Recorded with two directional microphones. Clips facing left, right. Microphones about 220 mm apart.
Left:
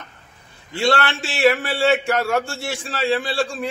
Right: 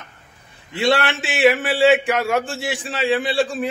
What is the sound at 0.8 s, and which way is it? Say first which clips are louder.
Speech: right 1 dB; 20° right (ahead or behind).